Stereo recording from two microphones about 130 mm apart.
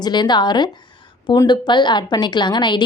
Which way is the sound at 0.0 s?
35° left (ahead or behind).